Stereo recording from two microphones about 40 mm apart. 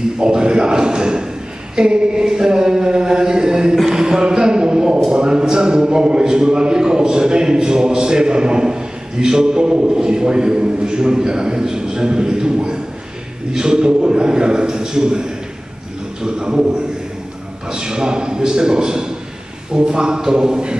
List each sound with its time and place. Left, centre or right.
0.2 s a man's voice: right
3.8 s a sound: centre
5.1 s a man's voice: right
17.6 s a man's voice: centre